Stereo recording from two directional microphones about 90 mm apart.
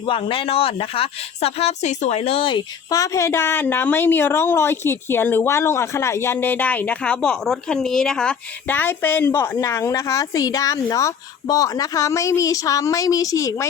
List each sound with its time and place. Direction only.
0.0 s speech: 80° left
2.9 s a woman's voice: 40° left (ahead or behind); by 8.4 s 5° left (ahead or behind)
8.6 s a woman's voice: 20° left (ahead or behind); by 13.7 s 35° left (ahead or behind)